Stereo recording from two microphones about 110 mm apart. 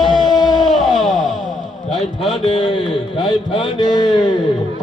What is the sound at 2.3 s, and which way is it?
Speech, 55° left (ahead or behind).